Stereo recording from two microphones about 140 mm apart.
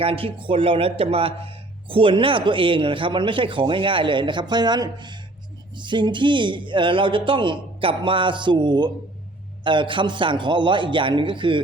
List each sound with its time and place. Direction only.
0.0 s speech: 40° right (ahead or behind)